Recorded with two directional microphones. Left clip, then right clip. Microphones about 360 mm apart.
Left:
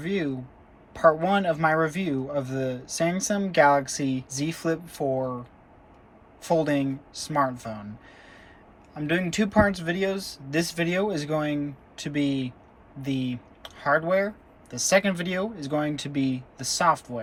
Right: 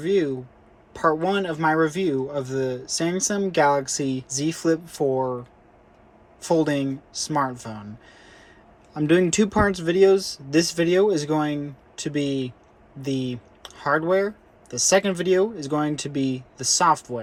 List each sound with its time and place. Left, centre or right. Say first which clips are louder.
0.0 s speech: right 7 dB; centre
8.9 s speech: right 7 dB; centre